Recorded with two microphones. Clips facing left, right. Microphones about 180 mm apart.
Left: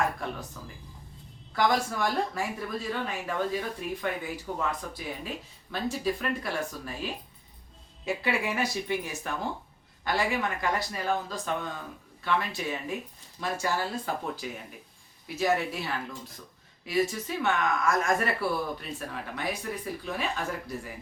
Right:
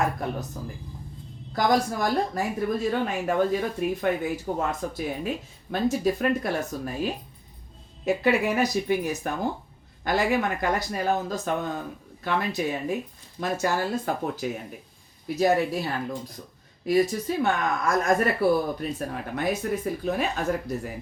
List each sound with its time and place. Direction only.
0.2 s speech: 40° right (ahead or behind)